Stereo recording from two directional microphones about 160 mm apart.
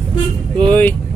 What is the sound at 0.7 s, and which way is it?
Speech, 10° left (ahead or behind).